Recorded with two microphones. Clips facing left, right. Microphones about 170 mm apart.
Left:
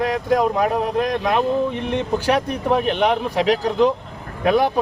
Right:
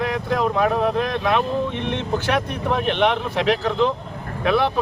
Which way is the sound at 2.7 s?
10° left (ahead or behind).